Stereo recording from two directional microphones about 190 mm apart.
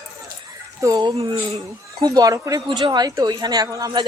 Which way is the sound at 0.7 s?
20° right (ahead or behind).